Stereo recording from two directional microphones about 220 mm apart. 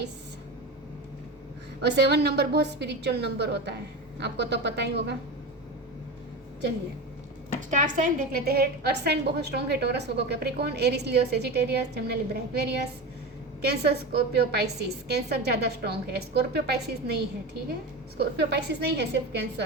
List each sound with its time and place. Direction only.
1.8 s a woman's voice: 50° right (ahead or behind)
7.7 s a woman's voice: 35° right (ahead or behind)
18.2 s a woman's voice: 50° right (ahead or behind)